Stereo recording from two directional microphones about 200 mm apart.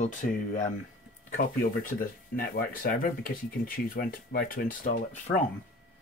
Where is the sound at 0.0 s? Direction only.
40° left (ahead or behind).